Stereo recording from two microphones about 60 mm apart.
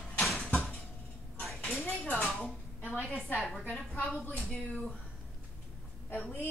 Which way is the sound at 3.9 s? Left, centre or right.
Centre.